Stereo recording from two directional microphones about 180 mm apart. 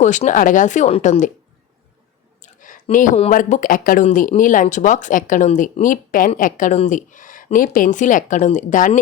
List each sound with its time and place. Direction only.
0.0 s speech: 40° left (ahead or behind)
2.4 s a sound: 45° left (ahead or behind)
3.2 s speech: 45° left (ahead or behind)